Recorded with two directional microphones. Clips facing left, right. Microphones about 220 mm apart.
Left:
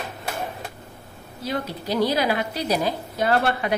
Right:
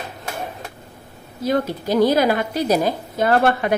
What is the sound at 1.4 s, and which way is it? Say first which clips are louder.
A woman's voice: right 8 dB; 50° right (ahead or behind).